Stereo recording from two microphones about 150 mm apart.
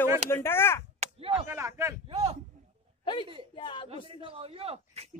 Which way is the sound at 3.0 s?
30° left (ahead or behind).